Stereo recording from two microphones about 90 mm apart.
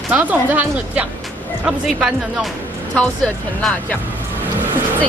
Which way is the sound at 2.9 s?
10° left (ahead or behind).